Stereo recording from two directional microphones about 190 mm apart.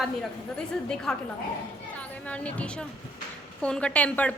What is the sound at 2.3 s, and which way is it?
A woman's voice, 5° left (ahead or behind).